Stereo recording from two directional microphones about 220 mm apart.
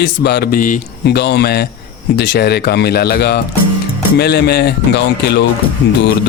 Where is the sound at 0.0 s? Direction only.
50° left (ahead or behind).